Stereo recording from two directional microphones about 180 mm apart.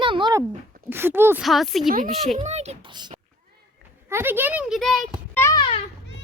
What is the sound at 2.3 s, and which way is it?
Speech, 40° right (ahead or behind).